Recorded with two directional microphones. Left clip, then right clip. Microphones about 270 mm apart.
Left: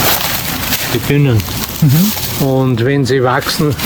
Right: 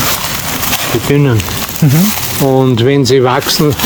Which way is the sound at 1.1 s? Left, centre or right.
Centre.